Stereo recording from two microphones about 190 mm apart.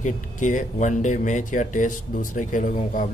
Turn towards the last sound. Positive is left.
turn(degrees=45)  # may be behind; listen again after turning